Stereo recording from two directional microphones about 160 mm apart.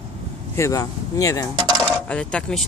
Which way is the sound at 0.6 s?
20° left (ahead or behind).